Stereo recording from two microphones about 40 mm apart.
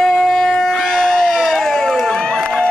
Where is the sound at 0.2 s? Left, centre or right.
Centre.